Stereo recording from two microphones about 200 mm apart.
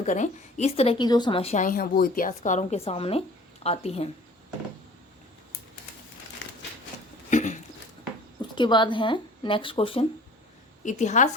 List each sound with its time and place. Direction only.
0.0 s a woman's voice: 35° left (ahead or behind)
7.3 s patter: 40° left (ahead or behind)
8.4 s a woman's voice: 25° left (ahead or behind)